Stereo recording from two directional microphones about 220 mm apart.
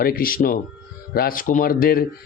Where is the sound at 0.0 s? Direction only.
40° left (ahead or behind).